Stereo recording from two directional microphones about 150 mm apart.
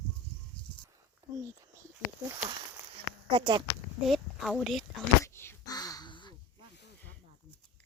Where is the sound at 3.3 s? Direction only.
35° right (ahead or behind).